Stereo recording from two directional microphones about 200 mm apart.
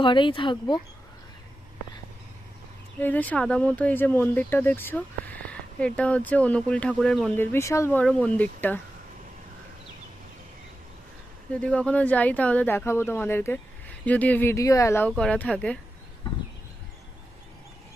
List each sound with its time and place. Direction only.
0.0 s speech: 25° left (ahead or behind)
3.0 s speech: 10° left (ahead or behind)
11.6 s speech: 5° left (ahead or behind)